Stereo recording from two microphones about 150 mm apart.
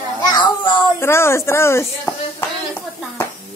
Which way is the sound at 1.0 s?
15° left (ahead or behind).